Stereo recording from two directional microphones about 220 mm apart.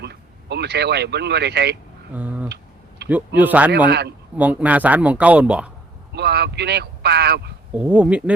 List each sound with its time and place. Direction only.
0.0 s speech: 50° right (ahead or behind)
2.1 s a sound: 5° right (ahead or behind)
3.1 s speech: 10° right (ahead or behind)
3.8 s speech: 50° right (ahead or behind)
4.4 s speech: 5° right (ahead or behind)
6.1 s speech: 50° right (ahead or behind)
7.7 s speech: 5° right (ahead or behind)